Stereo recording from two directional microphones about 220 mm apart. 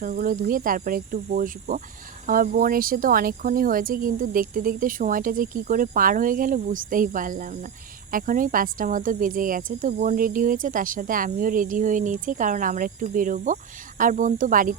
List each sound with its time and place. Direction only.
0.0 s speech: 40° right (ahead or behind)